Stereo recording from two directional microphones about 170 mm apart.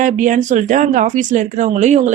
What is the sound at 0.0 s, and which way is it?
Speech, 50° right (ahead or behind).